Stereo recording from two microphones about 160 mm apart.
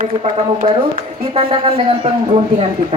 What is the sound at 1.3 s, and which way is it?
Speech, 35° right (ahead or behind).